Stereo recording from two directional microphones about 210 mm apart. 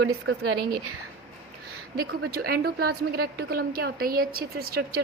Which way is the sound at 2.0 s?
45° right (ahead or behind).